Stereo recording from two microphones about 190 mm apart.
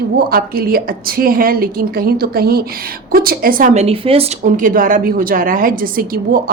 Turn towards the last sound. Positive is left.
turn(degrees=-50)  # may be behind; listen again after turning